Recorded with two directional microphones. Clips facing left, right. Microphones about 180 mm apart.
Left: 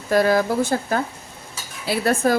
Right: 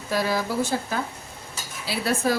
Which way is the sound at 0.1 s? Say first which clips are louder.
Left 8 dB; 50° left (ahead or behind).